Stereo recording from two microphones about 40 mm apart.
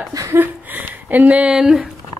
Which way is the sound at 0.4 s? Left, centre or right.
Right.